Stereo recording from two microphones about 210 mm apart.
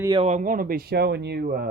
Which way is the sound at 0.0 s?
20° right (ahead or behind).